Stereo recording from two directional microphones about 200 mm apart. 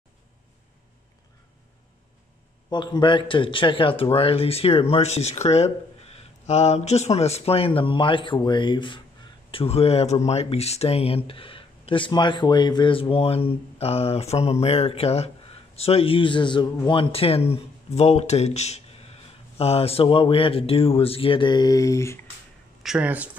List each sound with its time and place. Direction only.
2.7 s speech: 20° left (ahead or behind)
22.8 s speech: 5° right (ahead or behind)